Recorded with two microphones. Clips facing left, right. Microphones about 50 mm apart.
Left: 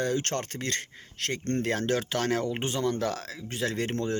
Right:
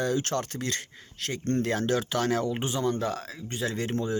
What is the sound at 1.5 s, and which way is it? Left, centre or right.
Speech, left.